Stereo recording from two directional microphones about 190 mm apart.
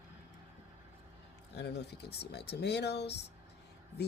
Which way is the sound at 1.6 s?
60° left (ahead or behind).